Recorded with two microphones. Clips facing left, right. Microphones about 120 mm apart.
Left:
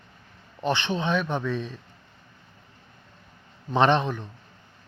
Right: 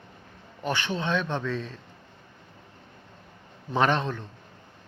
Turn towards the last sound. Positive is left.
turn(degrees=15)  # may be behind; listen again after turning